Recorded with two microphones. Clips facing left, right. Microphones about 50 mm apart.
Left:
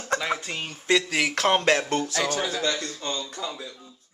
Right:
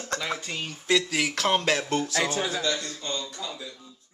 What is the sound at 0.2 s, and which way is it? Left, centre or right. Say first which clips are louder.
Speech: left 3 dB; centre.